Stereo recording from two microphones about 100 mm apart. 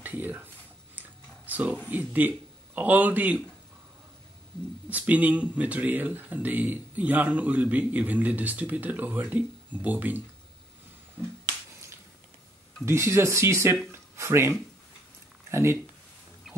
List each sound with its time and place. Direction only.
0.0 s speech: 15° right (ahead or behind)
0.9 s a sound: 15° right (ahead or behind)
1.9 s speech: 15° right (ahead or behind)
4.8 s speech: 15° right (ahead or behind)
12.8 s speech: 25° right (ahead or behind)